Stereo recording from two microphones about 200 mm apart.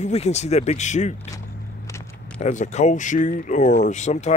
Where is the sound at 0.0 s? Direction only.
35° left (ahead or behind).